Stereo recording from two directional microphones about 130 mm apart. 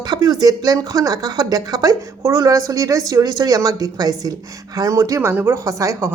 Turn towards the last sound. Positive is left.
turn(degrees=-25)  # may be behind; listen again after turning